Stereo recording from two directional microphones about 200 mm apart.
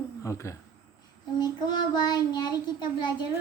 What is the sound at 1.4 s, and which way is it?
Child singing, 20° left (ahead or behind).